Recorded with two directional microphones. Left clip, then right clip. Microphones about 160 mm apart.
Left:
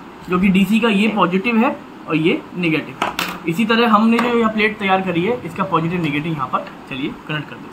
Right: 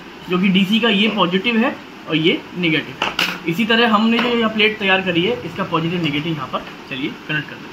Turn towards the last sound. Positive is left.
turn(degrees=20)  # may be behind; listen again after turning